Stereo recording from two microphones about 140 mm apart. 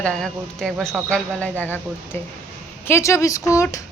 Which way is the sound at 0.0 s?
5° left (ahead or behind).